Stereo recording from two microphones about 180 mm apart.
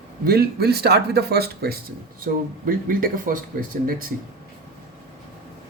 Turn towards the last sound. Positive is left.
turn(degrees=-50)  # may be behind; listen again after turning